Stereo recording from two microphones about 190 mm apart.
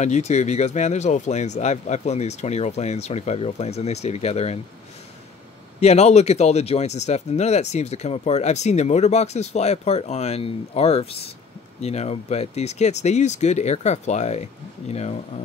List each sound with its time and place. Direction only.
0.0 s speech: 35° left (ahead or behind)
5.8 s speech: 35° left (ahead or behind)